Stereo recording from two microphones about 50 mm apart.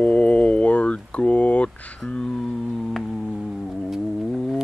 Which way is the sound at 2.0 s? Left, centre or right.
Centre.